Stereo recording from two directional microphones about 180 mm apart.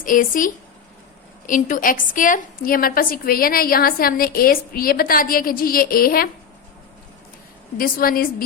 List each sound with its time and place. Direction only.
0.0 s a woman's voice: 50° left (ahead or behind)
7.8 s a woman's voice: 55° left (ahead or behind)